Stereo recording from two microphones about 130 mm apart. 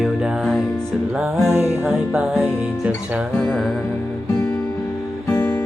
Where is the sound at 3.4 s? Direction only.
5° left (ahead or behind).